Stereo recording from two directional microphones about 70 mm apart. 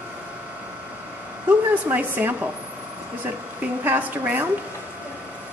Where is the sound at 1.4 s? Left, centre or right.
Right.